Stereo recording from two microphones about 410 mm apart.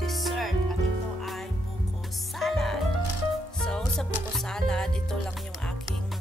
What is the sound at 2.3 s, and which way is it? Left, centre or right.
Music, centre.